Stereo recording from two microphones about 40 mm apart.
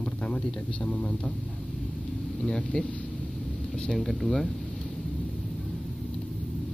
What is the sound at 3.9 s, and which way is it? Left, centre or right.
Speech, centre.